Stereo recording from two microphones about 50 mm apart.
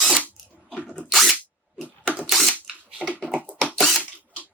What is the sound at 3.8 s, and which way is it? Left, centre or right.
Camera, centre.